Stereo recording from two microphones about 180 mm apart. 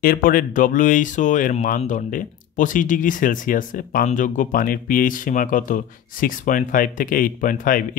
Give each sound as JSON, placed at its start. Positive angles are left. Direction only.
{"t": 0.0, "sound": "speech", "side_deg": 55}